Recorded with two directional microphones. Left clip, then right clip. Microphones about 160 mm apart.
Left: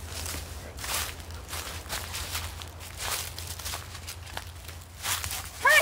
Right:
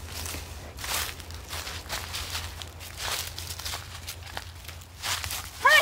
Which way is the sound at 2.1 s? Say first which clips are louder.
Right 1 dB; 40° right (ahead or behind).